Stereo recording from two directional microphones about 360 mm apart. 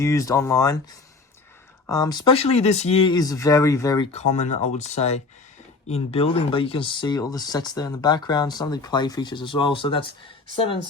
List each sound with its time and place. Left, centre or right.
0.0 s speech: centre
1.9 s speech: centre